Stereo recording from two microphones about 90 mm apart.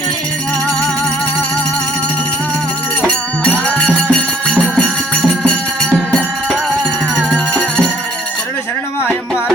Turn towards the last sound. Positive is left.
turn(degrees=10)  # may be behind; listen again after turning